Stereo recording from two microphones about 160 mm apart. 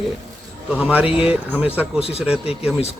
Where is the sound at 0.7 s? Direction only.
10° right (ahead or behind).